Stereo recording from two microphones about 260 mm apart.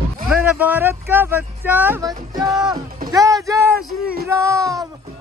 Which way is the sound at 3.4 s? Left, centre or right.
Centre.